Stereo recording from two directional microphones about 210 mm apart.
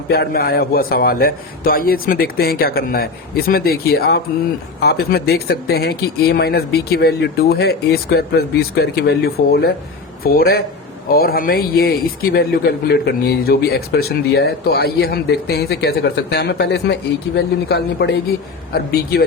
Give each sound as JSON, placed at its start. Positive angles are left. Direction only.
{"t": 0.1, "sound": "speech", "side_deg": 50}